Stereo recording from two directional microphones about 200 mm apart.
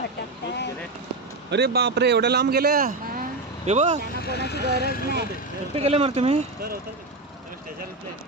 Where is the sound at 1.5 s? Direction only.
55° right (ahead or behind).